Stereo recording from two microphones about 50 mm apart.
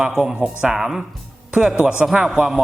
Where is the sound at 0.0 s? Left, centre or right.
Centre.